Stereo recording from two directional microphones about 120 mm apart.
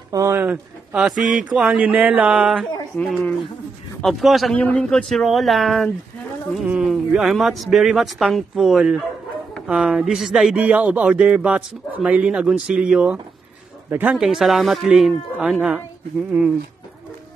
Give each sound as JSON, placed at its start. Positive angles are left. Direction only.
{"t": 0.1, "sound": "speech", "side_deg": -25}
{"t": 0.4, "sound": "speech", "side_deg": -5}
{"t": 2.6, "sound": "speech", "side_deg": 5}
{"t": 4.6, "sound": "speech", "side_deg": 10}
{"t": 13.8, "sound": "speech", "side_deg": -20}
{"t": 14.1, "sound": "speech", "side_deg": -5}